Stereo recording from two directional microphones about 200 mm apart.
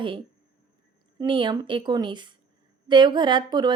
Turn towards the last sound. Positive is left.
turn(degrees=-20)  # may be behind; listen again after turning